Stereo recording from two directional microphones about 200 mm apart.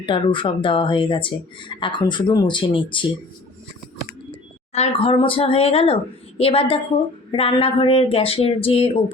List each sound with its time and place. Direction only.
0.0 s speech: 25° left (ahead or behind)
4.7 s speech: 30° left (ahead or behind)